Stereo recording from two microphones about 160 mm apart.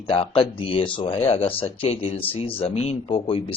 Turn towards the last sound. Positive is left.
turn(degrees=35)  # may be behind; listen again after turning